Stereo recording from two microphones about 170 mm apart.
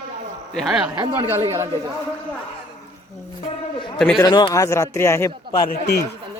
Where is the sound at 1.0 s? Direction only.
20° right (ahead or behind).